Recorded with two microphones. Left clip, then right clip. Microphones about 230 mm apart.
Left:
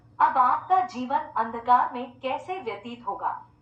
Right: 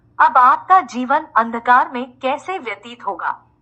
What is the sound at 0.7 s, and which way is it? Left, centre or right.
A woman's voice, right.